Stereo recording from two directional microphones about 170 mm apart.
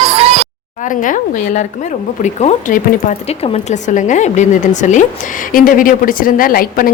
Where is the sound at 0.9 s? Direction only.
50° left (ahead or behind).